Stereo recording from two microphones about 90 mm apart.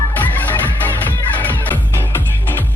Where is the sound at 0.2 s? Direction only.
20° left (ahead or behind).